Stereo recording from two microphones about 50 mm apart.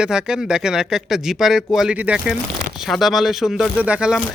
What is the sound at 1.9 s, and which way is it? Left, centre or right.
Speech, right.